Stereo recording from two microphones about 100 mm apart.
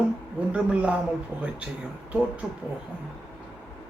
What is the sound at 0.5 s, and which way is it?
A man's voice, 15° right (ahead or behind).